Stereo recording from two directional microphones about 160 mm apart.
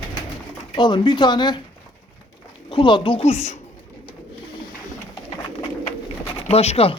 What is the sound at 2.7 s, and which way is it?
Speech, 30° left (ahead or behind).